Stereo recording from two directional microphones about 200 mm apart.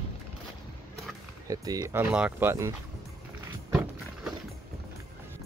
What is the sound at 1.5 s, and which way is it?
Speech, 20° right (ahead or behind).